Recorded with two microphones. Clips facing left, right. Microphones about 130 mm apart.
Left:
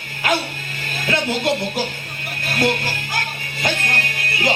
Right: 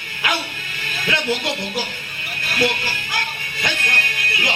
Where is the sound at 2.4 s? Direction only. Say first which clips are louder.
Left 2 dB; 45° left (ahead or behind).